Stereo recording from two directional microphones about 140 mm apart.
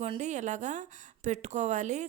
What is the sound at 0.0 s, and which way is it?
A woman's voice, 55° right (ahead or behind).